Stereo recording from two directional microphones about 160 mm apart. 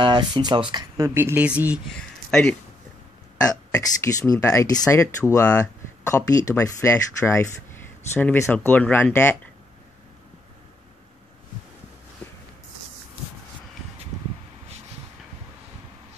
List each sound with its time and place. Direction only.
0.0 s speech: 30° right (ahead or behind); by 1.8 s 10° right (ahead or behind)
1.9 s speech: 5° left (ahead or behind)
3.4 s speech: 20° left (ahead or behind)